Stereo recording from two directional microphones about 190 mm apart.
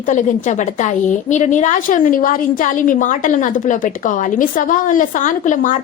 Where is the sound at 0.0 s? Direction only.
40° left (ahead or behind).